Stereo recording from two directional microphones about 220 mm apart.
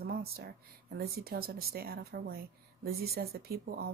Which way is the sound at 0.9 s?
45° right (ahead or behind).